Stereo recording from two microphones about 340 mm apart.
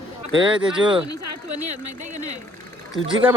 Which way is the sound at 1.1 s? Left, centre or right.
Right.